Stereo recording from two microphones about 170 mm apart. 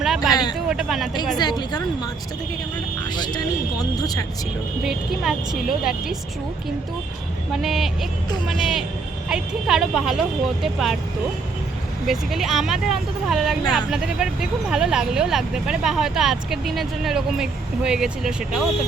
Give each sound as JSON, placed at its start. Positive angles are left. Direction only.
{"t": 0.0, "sound": "a sound", "side_deg": 0}
{"t": 0.7, "sound": "speech", "side_deg": 0}
{"t": 1.4, "sound": "speech", "side_deg": 25}
{"t": 3.2, "sound": "speech", "side_deg": 25}
{"t": 4.8, "sound": "speech", "side_deg": 0}
{"t": 7.5, "sound": "speech", "side_deg": 0}
{"t": 9.3, "sound": "speech", "side_deg": -5}
{"t": 12.0, "sound": "speech", "side_deg": 0}